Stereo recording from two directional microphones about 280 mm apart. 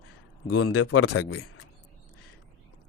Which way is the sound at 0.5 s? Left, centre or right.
Left.